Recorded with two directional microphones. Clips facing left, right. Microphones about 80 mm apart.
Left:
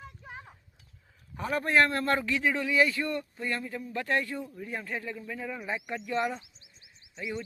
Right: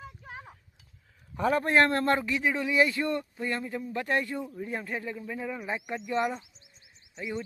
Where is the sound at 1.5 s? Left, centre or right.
Right.